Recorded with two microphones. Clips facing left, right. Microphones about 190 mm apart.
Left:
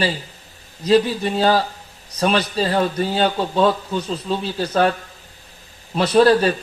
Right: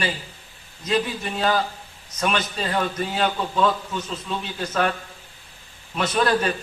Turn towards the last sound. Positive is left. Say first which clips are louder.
# left 7 dB
turn(degrees=35)  # may be behind; listen again after turning